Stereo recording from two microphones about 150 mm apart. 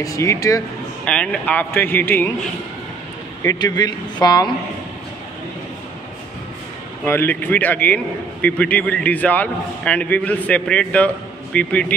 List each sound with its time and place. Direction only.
0.0 s speech: 20° left (ahead or behind)
1.0 s a man's voice: 5° left (ahead or behind)
3.4 s speech: 25° left (ahead or behind)
7.1 s a man's voice: 15° left (ahead or behind)